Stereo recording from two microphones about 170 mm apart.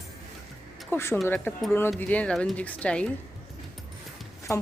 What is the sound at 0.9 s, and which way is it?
Speech, 15° left (ahead or behind).